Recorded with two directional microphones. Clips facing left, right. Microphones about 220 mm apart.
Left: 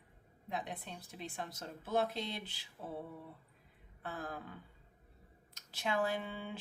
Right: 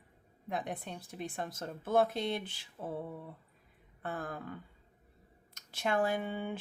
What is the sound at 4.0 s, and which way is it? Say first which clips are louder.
Speech: right 4 dB; 50° right (ahead or behind).